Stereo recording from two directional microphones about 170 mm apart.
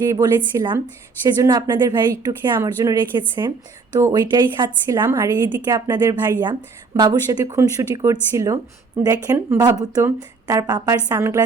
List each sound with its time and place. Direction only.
0.0 s speech: 20° right (ahead or behind)